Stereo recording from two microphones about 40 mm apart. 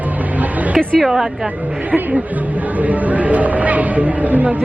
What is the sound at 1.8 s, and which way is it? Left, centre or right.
Speech, right.